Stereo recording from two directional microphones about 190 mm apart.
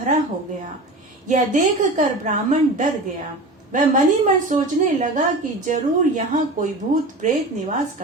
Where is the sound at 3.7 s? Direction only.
40° right (ahead or behind).